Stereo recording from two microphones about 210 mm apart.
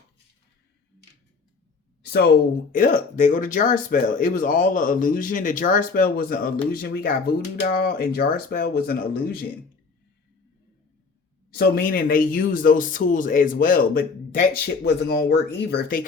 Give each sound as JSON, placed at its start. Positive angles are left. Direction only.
{"t": 2.7, "sound": "speech", "side_deg": 40}
{"t": 11.5, "sound": "speech", "side_deg": 45}